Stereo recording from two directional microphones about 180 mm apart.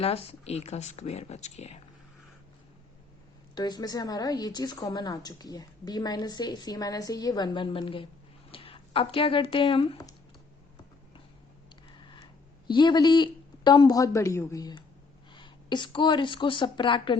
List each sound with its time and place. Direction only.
0.0 s speech: 35° left (ahead or behind)
3.5 s a woman's voice: 20° left (ahead or behind)
12.6 s a woman's voice: 25° left (ahead or behind)